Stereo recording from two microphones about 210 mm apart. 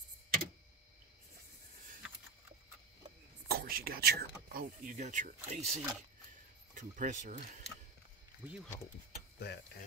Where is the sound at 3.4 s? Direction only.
45° right (ahead or behind).